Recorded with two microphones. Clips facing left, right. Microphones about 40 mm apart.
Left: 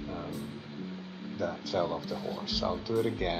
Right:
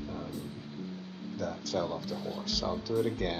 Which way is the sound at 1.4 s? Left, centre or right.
Centre.